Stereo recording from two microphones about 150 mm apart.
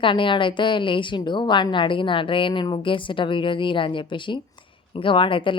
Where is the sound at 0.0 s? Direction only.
35° left (ahead or behind).